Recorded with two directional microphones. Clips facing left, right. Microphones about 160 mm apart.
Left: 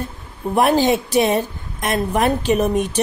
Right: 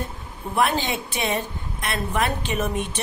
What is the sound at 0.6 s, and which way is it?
A woman's voice, 40° left (ahead or behind).